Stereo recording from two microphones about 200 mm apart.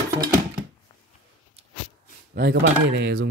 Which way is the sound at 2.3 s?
55° right (ahead or behind).